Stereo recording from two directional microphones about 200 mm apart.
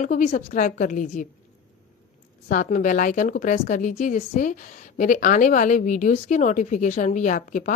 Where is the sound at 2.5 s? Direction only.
40° left (ahead or behind).